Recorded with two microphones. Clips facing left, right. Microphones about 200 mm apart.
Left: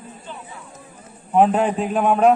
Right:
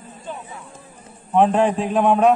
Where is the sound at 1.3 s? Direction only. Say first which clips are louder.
Even; 5° left (ahead or behind).